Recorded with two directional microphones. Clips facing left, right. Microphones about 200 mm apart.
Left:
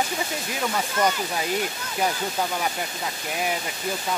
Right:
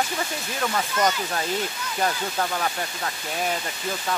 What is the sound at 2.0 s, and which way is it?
Speech, 10° left (ahead or behind).